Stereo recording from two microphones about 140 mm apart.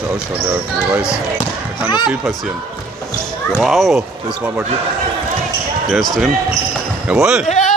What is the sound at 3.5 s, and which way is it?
Speech, centre (ahead or behind).